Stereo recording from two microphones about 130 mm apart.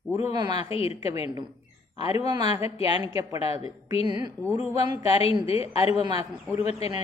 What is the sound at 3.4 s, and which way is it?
Speech, 50° left (ahead or behind).